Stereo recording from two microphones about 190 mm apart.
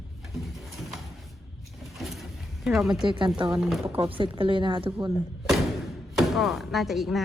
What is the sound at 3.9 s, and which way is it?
A woman's voice, 25° right (ahead or behind).